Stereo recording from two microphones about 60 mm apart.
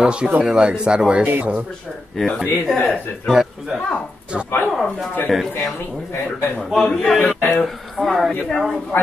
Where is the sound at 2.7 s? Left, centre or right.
Centre.